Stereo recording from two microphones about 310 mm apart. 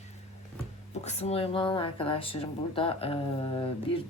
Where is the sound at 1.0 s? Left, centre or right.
Centre.